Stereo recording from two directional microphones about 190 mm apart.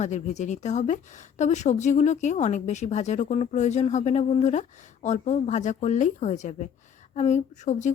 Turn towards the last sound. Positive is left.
turn(degrees=40)  # may be behind; listen again after turning